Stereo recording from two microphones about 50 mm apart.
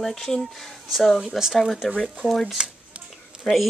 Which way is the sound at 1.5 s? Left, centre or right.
Centre.